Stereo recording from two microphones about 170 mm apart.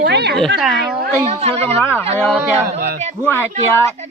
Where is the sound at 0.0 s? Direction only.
75° right (ahead or behind).